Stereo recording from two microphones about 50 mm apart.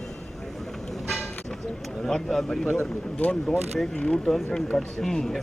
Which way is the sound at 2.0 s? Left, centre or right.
Centre.